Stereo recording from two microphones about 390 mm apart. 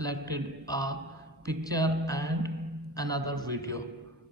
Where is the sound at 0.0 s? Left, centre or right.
Centre.